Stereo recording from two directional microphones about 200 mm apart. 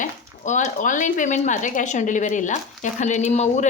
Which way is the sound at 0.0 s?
40° left (ahead or behind).